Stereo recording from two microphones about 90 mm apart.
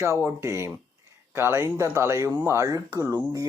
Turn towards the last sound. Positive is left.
turn(degrees=-40)  # may be behind; listen again after turning